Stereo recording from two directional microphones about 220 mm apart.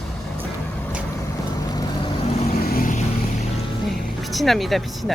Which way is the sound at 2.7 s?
40° left (ahead or behind).